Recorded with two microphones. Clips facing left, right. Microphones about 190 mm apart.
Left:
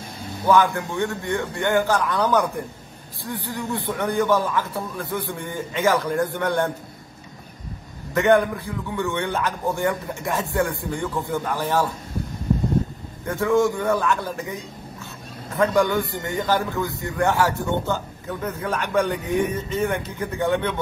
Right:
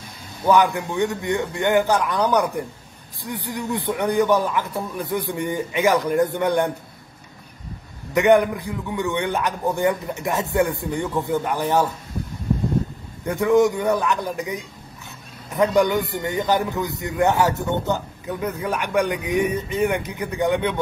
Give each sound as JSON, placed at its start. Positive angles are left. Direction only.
{"t": 0.5, "sound": "a man's voice", "side_deg": -15}
{"t": 8.1, "sound": "a man's voice", "side_deg": -15}
{"t": 13.2, "sound": "a man's voice", "side_deg": -15}